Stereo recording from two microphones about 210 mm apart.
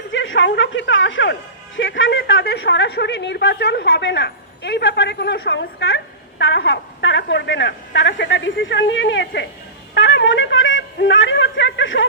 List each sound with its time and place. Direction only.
0.1 s speech: 65° left (ahead or behind)